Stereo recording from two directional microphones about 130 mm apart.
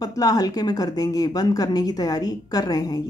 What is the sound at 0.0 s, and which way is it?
A woman's voice, 30° left (ahead or behind).